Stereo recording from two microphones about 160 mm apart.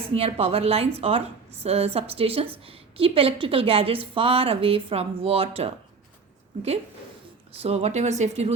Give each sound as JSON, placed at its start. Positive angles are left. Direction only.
{"t": 0.0, "sound": "a woman's voice", "side_deg": -35}
{"t": 7.6, "sound": "a woman's voice", "side_deg": -40}